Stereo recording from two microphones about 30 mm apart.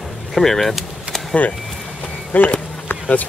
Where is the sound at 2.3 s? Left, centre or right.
Left.